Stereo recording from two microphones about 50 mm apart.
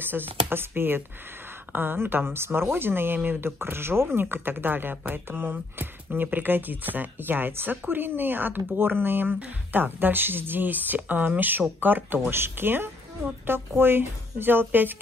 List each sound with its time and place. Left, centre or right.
0.0 s speech: right